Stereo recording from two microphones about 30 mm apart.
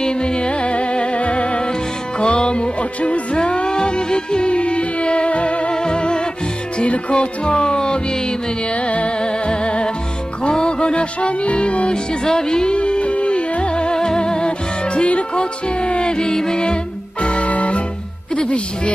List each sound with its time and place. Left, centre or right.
0.0 s music: left
3.0 s music: left
5.7 s music: left
8.7 s music: left
12.3 s music: left
17.2 s music: left